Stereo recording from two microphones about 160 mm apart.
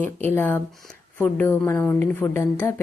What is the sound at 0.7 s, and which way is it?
Speech, centre (ahead or behind).